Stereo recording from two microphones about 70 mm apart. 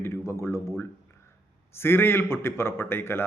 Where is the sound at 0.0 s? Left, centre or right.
Left.